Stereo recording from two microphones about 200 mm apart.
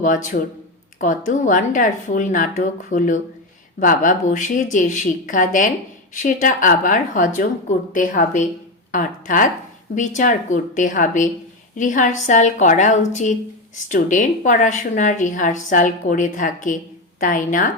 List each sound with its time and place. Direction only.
0.0 s speech: 40° left (ahead or behind)